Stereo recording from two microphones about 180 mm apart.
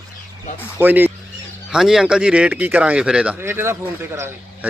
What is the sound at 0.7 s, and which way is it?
Speech, 10° right (ahead or behind).